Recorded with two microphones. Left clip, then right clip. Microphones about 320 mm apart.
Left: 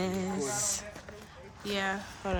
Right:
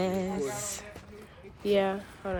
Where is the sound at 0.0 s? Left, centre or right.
Centre.